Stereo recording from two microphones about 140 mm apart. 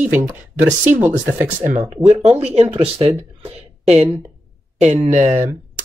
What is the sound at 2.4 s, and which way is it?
Speech, 45° right (ahead or behind).